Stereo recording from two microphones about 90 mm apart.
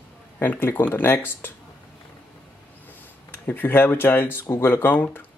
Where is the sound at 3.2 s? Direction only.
20° left (ahead or behind).